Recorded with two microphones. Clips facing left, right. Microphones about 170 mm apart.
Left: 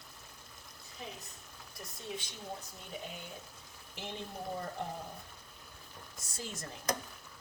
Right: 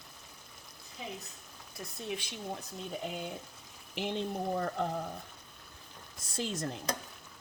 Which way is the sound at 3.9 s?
85° right.